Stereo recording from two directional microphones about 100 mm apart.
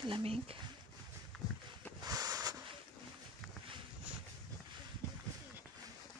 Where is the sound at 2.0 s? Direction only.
40° right (ahead or behind).